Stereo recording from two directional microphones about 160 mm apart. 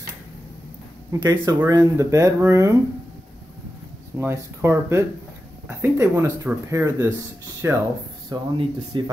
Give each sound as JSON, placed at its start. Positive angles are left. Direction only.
{"t": 1.1, "sound": "speech", "side_deg": -20}
{"t": 4.2, "sound": "speech", "side_deg": -15}